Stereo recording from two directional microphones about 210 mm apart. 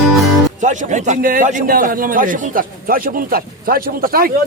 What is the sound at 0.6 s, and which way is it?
A man's voice, 35° right (ahead or behind).